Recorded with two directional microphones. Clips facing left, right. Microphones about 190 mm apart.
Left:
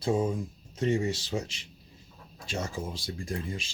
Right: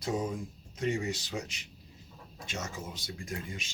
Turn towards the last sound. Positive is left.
turn(degrees=30)  # may be behind; listen again after turning